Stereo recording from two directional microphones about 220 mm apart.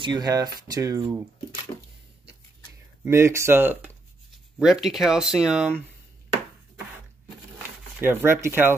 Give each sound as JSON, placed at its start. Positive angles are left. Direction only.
{"t": 0.0, "sound": "speech", "side_deg": -20}
{"t": 1.7, "sound": "a sound", "side_deg": 25}
{"t": 3.0, "sound": "speech", "side_deg": -10}
{"t": 8.0, "sound": "speech", "side_deg": -10}